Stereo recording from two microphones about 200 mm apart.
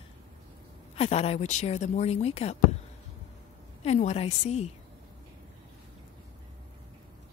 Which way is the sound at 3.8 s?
35° left (ahead or behind).